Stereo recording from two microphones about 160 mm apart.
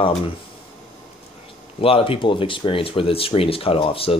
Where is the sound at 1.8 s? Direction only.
35° left (ahead or behind).